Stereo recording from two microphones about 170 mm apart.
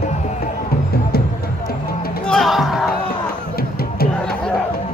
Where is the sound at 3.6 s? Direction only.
65° left (ahead or behind).